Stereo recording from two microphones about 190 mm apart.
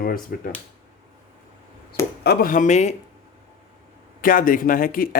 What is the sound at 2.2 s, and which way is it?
Speech, 45° left (ahead or behind).